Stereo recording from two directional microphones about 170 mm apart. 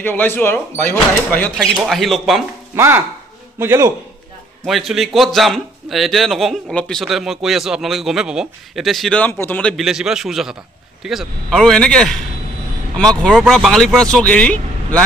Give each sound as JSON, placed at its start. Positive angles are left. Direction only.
{"t": 0.0, "sound": "speech", "side_deg": 10}
{"t": 2.7, "sound": "a man's voice", "side_deg": -15}
{"t": 4.6, "sound": "a man's voice", "side_deg": 0}